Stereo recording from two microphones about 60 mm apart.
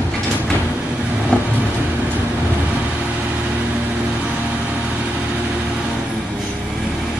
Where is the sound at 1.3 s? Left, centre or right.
Centre.